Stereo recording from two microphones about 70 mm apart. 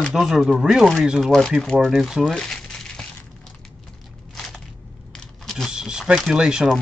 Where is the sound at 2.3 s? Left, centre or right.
Centre.